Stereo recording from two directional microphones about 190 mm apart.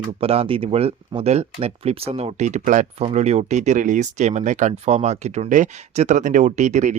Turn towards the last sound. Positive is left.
turn(degrees=-40)  # may be behind; listen again after turning